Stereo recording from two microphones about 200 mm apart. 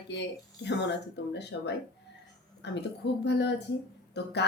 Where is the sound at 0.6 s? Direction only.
60° left (ahead or behind).